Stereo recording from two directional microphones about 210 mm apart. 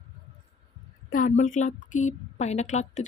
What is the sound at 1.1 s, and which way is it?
A woman's voice, 40° left (ahead or behind).